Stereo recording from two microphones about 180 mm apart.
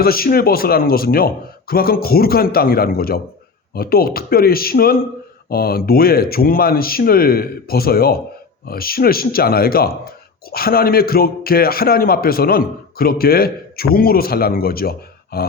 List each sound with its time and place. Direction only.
0.0 s a man's voice: 55° left (ahead or behind)